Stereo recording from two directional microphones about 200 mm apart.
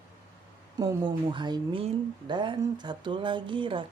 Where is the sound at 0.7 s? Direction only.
20° right (ahead or behind).